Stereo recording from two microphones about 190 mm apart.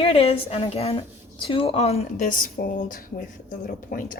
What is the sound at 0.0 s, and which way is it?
A woman's voice, 30° left (ahead or behind).